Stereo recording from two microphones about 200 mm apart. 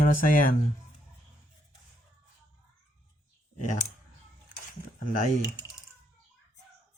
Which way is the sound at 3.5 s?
40° left (ahead or behind).